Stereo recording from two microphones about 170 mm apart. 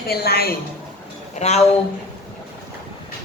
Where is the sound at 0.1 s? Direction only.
65° left (ahead or behind).